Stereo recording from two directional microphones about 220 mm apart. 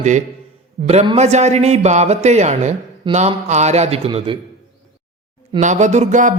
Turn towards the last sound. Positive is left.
turn(degrees=-35)  # may be behind; listen again after turning